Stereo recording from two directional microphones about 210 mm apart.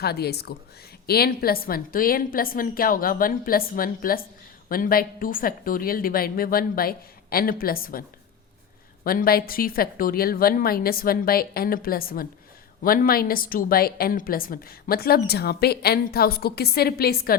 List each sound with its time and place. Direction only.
0.0 s a woman's voice: 50° left (ahead or behind)
9.0 s a woman's voice: 45° left (ahead or behind)